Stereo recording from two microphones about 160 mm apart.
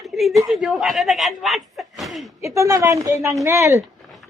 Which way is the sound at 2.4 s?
20° right (ahead or behind).